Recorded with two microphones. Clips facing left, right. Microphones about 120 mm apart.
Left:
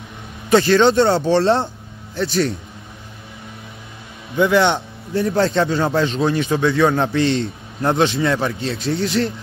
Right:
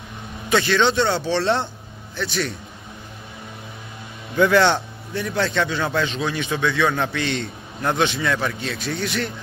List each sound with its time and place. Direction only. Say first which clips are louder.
0.5 s a man's voice: left 6 dB; 35° left (ahead or behind)
4.4 s speech: left 1 dB; 20° left (ahead or behind)
5.1 s a man's voice: left 6 dB; 35° left (ahead or behind)